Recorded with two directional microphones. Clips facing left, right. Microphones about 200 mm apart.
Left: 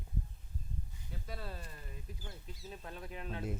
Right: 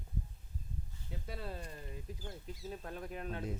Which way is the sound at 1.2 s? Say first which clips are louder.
Right 2 dB; 25° right (ahead or behind).